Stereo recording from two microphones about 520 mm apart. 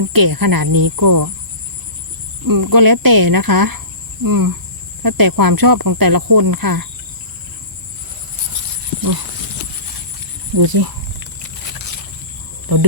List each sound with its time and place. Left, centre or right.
0.0 s speech: right
2.5 s speech: right
10.6 s wild animals: right
12.7 s speech: right